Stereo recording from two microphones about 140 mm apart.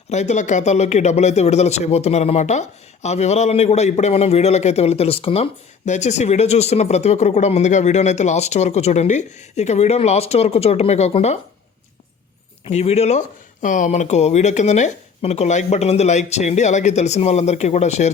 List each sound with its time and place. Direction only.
0.1 s speech: 55° left (ahead or behind)
12.6 s speech: 50° left (ahead or behind)